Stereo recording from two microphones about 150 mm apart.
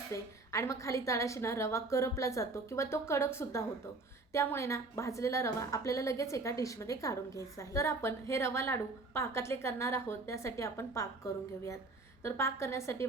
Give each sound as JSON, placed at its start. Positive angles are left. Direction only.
{"t": 0.1, "sound": "a woman's voice", "side_deg": 20}